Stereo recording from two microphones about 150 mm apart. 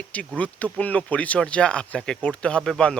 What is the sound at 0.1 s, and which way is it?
Speech, 10° left (ahead or behind).